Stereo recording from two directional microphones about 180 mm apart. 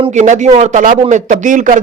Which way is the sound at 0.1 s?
40° right (ahead or behind).